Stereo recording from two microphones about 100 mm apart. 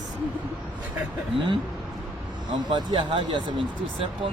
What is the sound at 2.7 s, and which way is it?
Speech, 55° right (ahead or behind).